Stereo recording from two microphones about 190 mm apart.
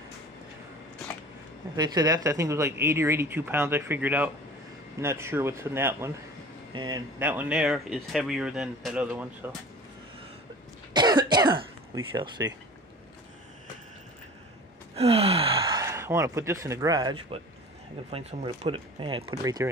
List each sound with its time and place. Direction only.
1.8 s speech: 20° right (ahead or behind)
7.2 s speech: 10° right (ahead or behind)
10.9 s speech: 20° right (ahead or behind)
15.0 s speech: 30° right (ahead or behind)